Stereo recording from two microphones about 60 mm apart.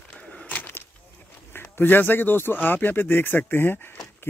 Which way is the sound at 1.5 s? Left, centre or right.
Left.